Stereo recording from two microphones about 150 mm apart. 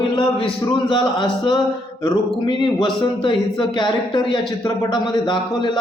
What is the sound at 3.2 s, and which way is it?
A man's voice, 35° left (ahead or behind).